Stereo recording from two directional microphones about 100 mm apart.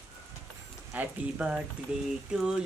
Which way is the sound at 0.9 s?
15° right (ahead or behind).